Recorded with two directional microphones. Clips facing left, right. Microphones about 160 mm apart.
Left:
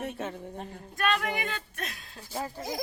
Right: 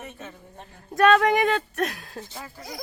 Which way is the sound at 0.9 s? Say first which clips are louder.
Right 11 dB; 85° right.